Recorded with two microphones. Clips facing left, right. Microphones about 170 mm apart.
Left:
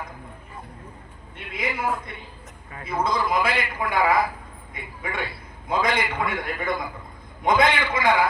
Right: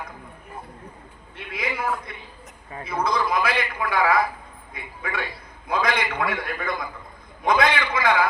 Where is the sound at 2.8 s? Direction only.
25° left (ahead or behind).